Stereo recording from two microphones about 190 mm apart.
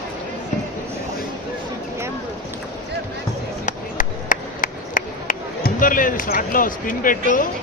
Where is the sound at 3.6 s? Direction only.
45° left (ahead or behind).